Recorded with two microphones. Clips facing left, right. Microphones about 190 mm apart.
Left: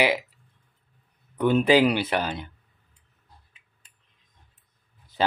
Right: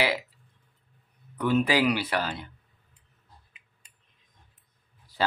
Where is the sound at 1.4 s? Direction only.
25° left (ahead or behind).